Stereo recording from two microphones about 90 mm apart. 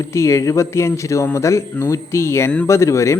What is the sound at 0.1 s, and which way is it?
A man's voice, 30° left (ahead or behind).